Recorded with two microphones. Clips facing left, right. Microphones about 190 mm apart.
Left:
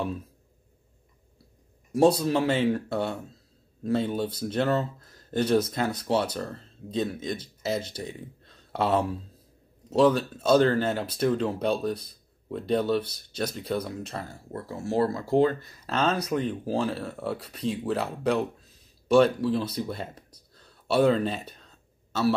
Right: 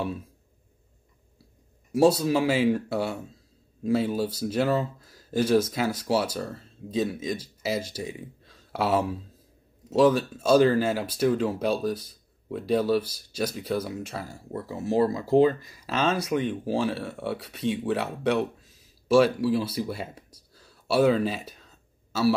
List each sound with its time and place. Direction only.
1.9 s speech: 5° right (ahead or behind)